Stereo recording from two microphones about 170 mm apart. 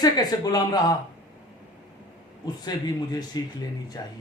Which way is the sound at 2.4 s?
25° left (ahead or behind).